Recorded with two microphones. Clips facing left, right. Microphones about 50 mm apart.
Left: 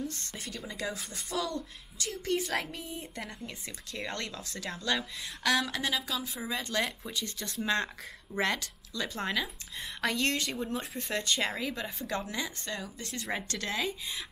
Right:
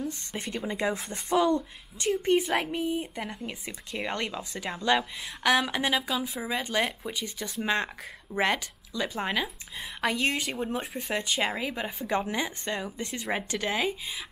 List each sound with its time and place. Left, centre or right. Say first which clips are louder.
0.0 s speech: right 4 dB; centre
0.4 s speech: right 8 dB; right
10.9 s speech: right 2 dB; centre